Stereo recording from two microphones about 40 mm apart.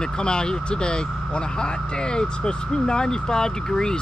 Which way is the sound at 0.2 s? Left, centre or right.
Left.